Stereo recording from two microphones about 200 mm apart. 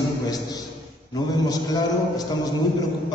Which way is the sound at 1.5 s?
20° left (ahead or behind).